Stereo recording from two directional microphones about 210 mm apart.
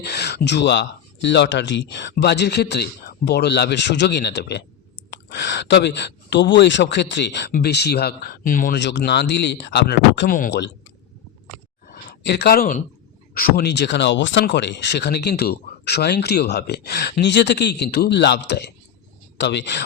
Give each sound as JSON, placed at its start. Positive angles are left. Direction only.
{"t": 0.0, "sound": "speech", "side_deg": 50}
{"t": 8.8, "sound": "speech", "side_deg": 55}
{"t": 11.9, "sound": "a sound", "side_deg": 50}
{"t": 13.3, "sound": "speech", "side_deg": 50}